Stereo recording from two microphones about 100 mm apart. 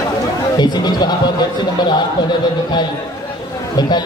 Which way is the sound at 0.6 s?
45° left (ahead or behind).